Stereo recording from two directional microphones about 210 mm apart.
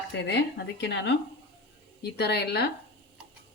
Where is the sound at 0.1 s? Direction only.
55° left (ahead or behind).